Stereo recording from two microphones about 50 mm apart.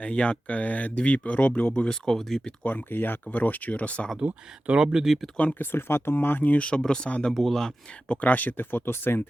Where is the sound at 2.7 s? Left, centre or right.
Left.